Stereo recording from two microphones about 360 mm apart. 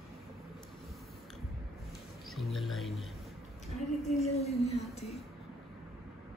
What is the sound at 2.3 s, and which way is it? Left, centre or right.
Speech, centre.